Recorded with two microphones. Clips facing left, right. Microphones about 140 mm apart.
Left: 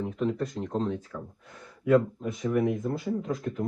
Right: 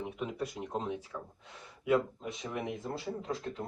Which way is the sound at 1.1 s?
20° right (ahead or behind).